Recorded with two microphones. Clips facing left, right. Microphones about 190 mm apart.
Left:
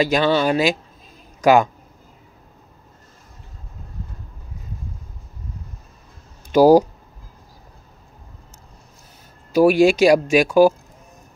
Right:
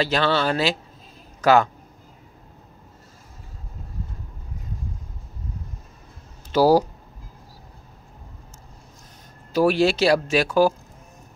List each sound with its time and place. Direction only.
0.0 s speech: 15° left (ahead or behind)
6.5 s speech: 15° left (ahead or behind)
9.5 s speech: 15° left (ahead or behind)